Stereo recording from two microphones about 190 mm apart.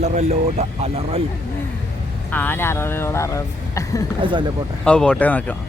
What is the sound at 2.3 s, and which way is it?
Speech, 10° left (ahead or behind).